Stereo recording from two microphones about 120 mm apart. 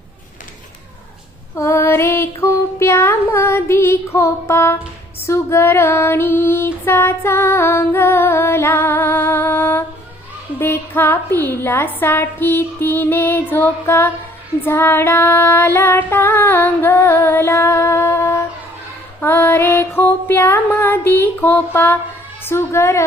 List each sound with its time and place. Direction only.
1.5 s child singing: 25° left (ahead or behind)
5.2 s female singing: 20° left (ahead or behind)